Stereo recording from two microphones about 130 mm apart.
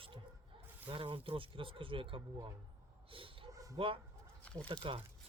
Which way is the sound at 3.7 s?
45° right (ahead or behind).